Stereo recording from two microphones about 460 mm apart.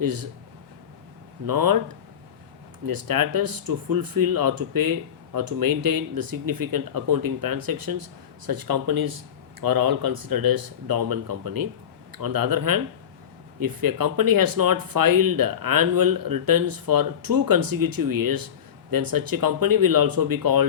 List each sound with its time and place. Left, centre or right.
0.0 s speech: right
1.5 s speech: right
2.8 s speech: right